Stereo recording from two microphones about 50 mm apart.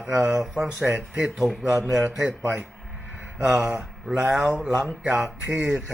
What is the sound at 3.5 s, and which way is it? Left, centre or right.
Speech, centre.